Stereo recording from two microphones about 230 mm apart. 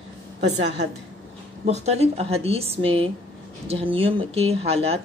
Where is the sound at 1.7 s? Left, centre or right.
Right.